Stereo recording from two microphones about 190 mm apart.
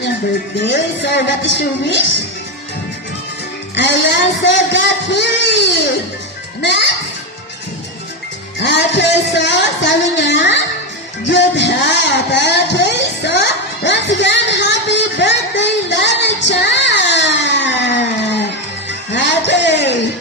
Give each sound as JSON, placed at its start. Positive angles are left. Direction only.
{"t": 0.6, "sound": "speech", "side_deg": 65}
{"t": 3.8, "sound": "a child's voice", "side_deg": 70}
{"t": 8.5, "sound": "speech", "side_deg": 65}
{"t": 13.8, "sound": "a sound", "side_deg": 70}
{"t": 18.9, "sound": "music", "side_deg": 70}